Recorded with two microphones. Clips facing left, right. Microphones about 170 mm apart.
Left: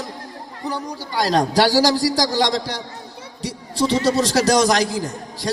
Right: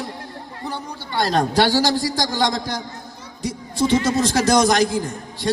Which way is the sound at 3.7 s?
35° left (ahead or behind).